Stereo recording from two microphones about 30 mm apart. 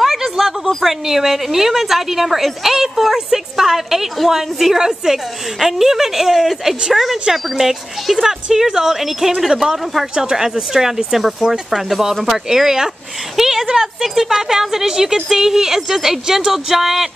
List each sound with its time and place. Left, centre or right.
0.0 s a sound: centre
0.8 s a woman's voice: centre
10.3 s a woman's voice: centre
13.4 s a sound: centre
14.0 s a woman's voice: centre
15.1 s a woman's voice: centre